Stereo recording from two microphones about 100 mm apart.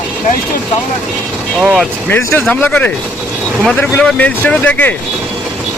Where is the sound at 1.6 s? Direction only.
5° right (ahead or behind).